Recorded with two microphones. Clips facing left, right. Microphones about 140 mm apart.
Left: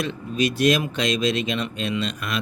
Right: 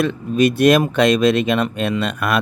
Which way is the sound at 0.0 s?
55° right (ahead or behind).